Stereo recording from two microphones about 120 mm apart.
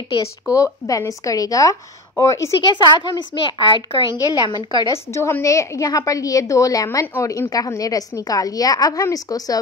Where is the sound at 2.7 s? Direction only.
40° left (ahead or behind).